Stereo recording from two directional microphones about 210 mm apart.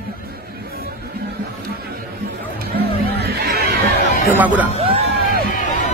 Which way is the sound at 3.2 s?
50° right (ahead or behind).